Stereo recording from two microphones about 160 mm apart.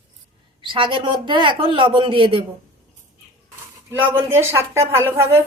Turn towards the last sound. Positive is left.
turn(degrees=-15)  # may be behind; listen again after turning